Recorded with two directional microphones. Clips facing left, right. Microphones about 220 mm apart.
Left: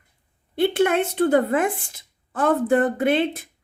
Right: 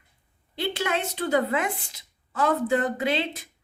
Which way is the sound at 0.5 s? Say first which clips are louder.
Left 9 dB; 55° left (ahead or behind).